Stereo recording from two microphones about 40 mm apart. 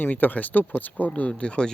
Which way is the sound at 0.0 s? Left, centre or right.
Left.